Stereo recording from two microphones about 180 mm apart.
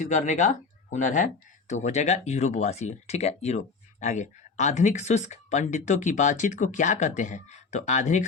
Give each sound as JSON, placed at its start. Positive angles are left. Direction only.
{"t": 0.0, "sound": "speech", "side_deg": 40}